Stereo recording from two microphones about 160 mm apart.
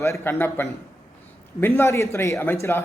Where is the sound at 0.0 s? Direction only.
15° left (ahead or behind).